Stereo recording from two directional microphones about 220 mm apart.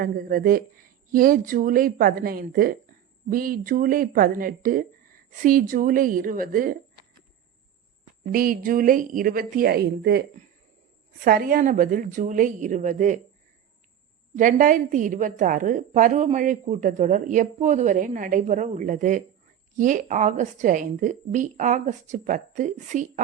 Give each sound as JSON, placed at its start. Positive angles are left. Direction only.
{"t": 0.0, "sound": "speech", "side_deg": -40}
{"t": 8.2, "sound": "speech", "side_deg": -40}
{"t": 14.3, "sound": "speech", "side_deg": -35}